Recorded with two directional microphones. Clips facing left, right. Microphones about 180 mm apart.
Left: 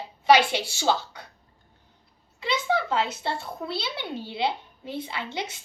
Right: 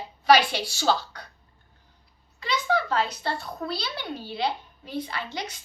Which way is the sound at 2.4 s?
25° left (ahead or behind).